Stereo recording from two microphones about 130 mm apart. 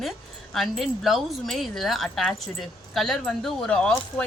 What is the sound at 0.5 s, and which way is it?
A woman's voice, centre (ahead or behind).